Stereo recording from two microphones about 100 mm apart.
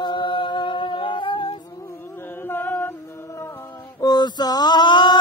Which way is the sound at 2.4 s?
20° left (ahead or behind).